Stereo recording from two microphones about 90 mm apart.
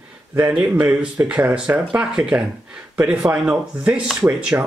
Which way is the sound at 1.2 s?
10° right (ahead or behind).